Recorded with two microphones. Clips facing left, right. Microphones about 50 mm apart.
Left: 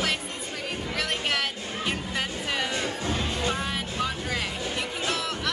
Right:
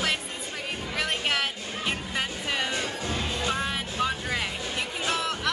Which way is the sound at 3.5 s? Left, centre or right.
Centre.